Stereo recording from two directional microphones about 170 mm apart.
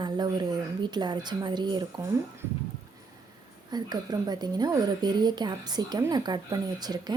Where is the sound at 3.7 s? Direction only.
25° right (ahead or behind).